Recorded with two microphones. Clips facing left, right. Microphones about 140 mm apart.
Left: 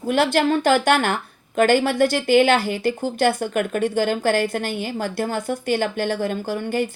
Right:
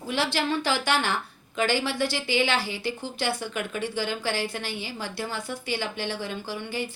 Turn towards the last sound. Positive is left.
turn(degrees=50)  # may be behind; listen again after turning